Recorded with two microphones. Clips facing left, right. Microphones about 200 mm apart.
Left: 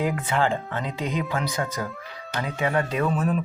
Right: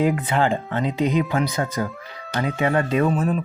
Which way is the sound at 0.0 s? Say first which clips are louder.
Right 4 dB; 20° right (ahead or behind).